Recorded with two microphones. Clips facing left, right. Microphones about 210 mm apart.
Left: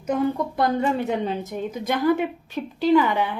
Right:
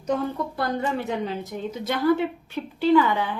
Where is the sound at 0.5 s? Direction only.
20° left (ahead or behind).